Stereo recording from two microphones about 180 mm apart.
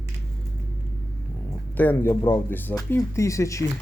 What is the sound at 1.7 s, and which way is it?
Speech, 10° left (ahead or behind).